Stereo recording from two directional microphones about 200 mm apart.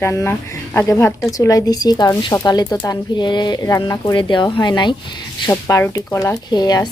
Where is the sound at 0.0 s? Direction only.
15° left (ahead or behind).